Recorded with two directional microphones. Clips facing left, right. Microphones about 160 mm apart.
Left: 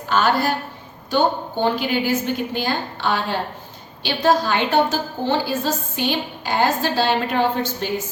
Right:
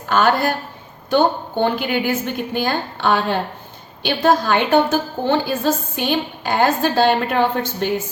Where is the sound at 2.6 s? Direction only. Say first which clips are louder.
Right 3 dB; 50° right (ahead or behind).